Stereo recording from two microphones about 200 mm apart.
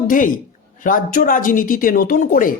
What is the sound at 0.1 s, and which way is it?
A woman's voice, 40° left (ahead or behind).